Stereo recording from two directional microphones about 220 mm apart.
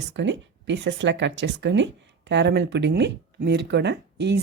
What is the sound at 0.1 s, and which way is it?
Speech, 55° right (ahead or behind).